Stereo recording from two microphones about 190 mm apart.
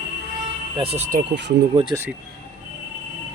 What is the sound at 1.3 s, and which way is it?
Speech, 65° right (ahead or behind).